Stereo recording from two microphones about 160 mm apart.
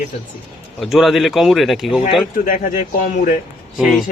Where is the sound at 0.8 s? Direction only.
Centre (ahead or behind).